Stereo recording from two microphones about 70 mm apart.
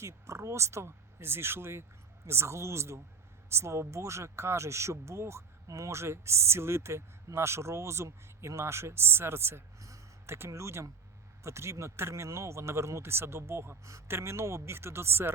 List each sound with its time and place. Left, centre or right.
0.0 s speech: right